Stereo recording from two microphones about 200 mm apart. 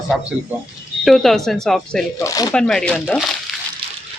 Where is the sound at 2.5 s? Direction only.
5° left (ahead or behind).